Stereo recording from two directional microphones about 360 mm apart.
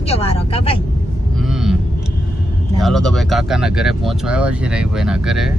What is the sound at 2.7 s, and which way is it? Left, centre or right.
Speech, centre.